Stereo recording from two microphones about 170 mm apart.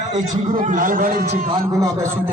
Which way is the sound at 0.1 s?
50° right (ahead or behind).